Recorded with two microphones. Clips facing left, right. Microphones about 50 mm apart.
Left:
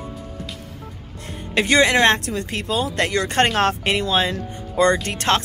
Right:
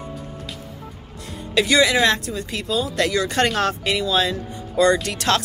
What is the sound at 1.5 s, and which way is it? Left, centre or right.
Speech, left.